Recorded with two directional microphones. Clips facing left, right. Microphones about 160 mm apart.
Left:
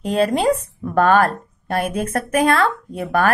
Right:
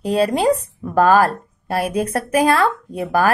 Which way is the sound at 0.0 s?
35° right (ahead or behind).